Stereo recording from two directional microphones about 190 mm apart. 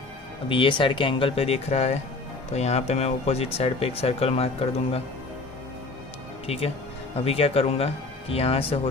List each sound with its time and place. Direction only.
0.5 s speech: 25° left (ahead or behind)
6.4 s speech: 30° left (ahead or behind)